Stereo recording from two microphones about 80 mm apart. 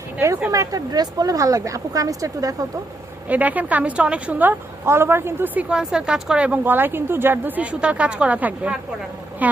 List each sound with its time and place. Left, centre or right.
0.5 s speech: right
3.2 s a woman's voice: centre
5.5 s speech: centre
6.7 s a woman's voice: right